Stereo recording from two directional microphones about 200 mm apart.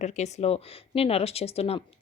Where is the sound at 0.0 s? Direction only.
35° left (ahead or behind).